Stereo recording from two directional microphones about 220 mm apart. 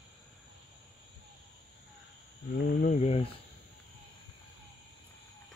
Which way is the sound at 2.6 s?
35° left (ahead or behind).